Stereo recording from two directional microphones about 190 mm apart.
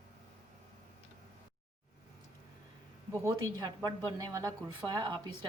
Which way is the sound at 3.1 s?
15° right (ahead or behind).